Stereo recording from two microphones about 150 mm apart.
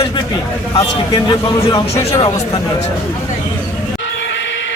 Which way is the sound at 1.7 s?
20° left (ahead or behind).